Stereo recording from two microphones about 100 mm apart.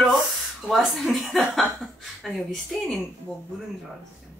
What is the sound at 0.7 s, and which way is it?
Speech, centre (ahead or behind).